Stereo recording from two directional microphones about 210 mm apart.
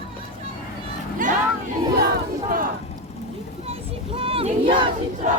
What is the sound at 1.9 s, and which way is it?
Battle cry, 50° right (ahead or behind).